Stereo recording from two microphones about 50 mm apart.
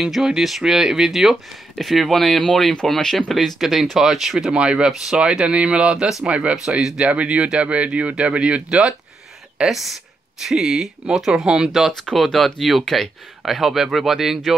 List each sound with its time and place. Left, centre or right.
0.0 s speech: centre
3.3 s speech: centre
4.5 s speech: centre
6.5 s speech: centre
7.1 s speech: right
9.7 s speech: centre
12.0 s speech: centre